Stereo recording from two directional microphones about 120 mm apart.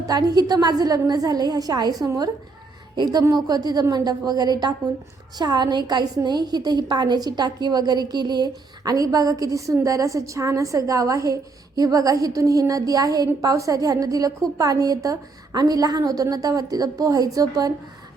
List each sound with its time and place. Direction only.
0.0 s a woman's voice: 35° right (ahead or behind)